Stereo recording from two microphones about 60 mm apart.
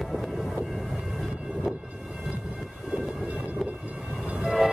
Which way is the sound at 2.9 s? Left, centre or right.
Centre.